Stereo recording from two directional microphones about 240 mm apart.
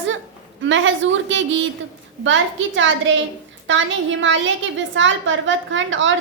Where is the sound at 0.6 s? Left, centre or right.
Right.